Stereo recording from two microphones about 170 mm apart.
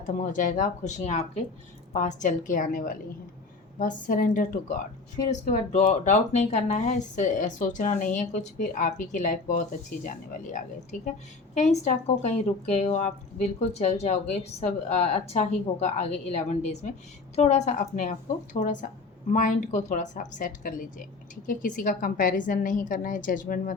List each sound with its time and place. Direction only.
0.0 s speech: 50° left (ahead or behind)